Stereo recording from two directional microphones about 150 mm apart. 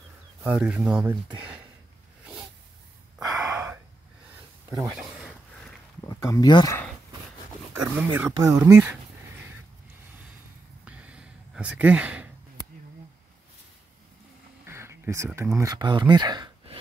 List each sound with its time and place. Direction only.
0.4 s speech: 10° right (ahead or behind)
3.2 s gasp: 5° right (ahead or behind)
4.9 s a sound: centre (ahead or behind)
6.0 s speech: 20° left (ahead or behind)
7.7 s speech: 15° right (ahead or behind)
10.9 s a sound: 10° right (ahead or behind)
14.7 s speech: 15° right (ahead or behind)